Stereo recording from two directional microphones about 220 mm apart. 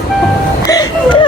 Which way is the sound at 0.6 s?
15° left (ahead or behind).